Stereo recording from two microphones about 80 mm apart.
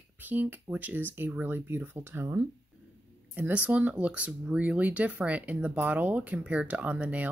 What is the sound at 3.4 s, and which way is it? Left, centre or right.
Speech, centre.